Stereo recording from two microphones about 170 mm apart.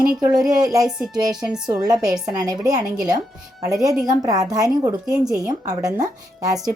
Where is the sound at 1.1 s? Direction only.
25° right (ahead or behind).